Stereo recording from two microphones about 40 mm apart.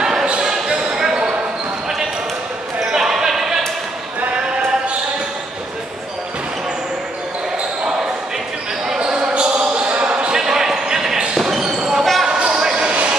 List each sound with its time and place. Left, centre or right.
0.0 s basketball bounce: centre
2.9 s basketball bounce: centre
9.0 s basketball bounce: right
10.3 s basketball bounce: centre
11.3 s basketball bounce: centre
11.6 s basketball bounce: centre
12.0 s basketball bounce: centre
12.3 s a sound: right